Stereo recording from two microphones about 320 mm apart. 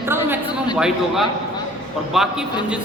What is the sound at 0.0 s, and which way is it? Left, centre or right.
Chatter, centre.